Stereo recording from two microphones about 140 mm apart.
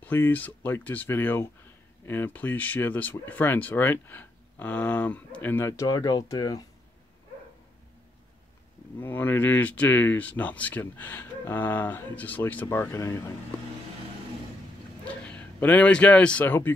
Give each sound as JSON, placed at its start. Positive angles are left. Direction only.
{"t": 0.0, "sound": "speech", "side_deg": 15}
{"t": 9.0, "sound": "speech", "side_deg": 15}
{"t": 15.2, "sound": "a man's voice", "side_deg": 10}